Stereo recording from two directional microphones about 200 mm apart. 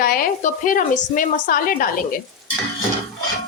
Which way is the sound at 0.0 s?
45° left (ahead or behind).